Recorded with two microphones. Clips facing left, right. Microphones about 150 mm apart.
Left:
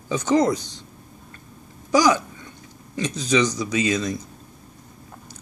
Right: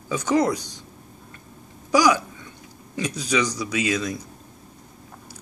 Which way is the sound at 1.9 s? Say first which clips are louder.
Left 1 dB; 10° right (ahead or behind).